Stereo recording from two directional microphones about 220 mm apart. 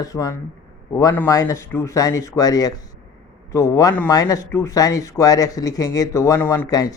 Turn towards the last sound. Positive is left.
turn(degrees=15)  # may be behind; listen again after turning